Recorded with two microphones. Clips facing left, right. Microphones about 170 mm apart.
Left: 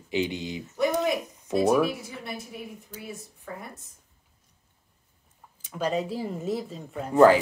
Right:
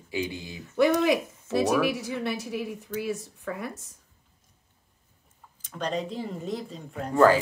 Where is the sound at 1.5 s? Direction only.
15° left (ahead or behind).